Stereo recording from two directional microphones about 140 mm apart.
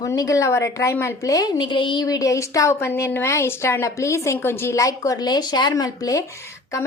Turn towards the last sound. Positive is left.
turn(degrees=20)  # may be behind; listen again after turning